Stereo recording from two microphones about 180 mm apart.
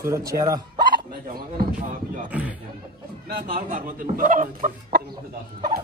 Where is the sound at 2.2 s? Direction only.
10° right (ahead or behind).